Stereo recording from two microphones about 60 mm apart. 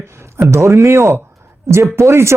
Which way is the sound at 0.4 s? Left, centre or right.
Right.